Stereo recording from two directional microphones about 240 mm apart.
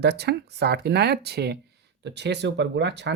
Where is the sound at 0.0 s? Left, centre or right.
Right.